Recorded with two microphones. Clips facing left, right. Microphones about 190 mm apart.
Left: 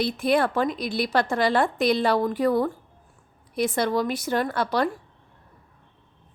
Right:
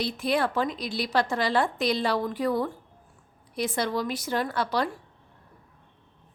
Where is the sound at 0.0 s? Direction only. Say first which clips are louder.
Left 4 dB; 55° left (ahead or behind).